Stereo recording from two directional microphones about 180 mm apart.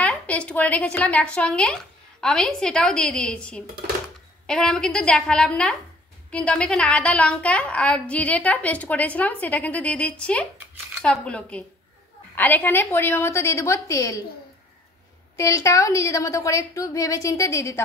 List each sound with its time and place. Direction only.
0.0 s a woman's voice: 5° left (ahead or behind)
15.3 s a woman's voice: 15° left (ahead or behind)